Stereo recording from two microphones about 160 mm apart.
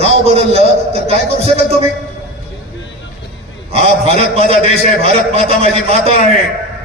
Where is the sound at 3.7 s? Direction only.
40° right (ahead or behind).